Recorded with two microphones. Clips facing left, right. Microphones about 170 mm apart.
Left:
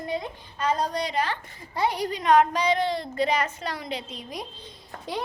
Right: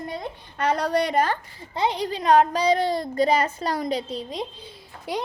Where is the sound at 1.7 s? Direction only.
25° right (ahead or behind).